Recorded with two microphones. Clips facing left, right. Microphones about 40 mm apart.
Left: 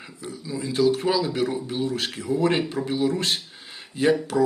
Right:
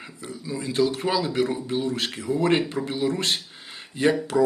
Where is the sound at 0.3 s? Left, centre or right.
Right.